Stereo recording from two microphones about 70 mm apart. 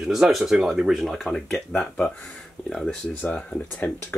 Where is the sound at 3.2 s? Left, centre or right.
Left.